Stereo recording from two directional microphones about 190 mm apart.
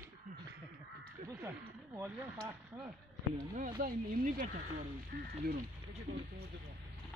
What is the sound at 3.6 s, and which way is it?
Speech, 45° right (ahead or behind).